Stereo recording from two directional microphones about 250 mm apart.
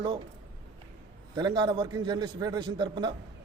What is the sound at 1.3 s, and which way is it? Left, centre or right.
A man's voice, centre.